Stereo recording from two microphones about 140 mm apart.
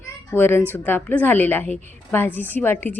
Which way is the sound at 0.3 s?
15° left (ahead or behind).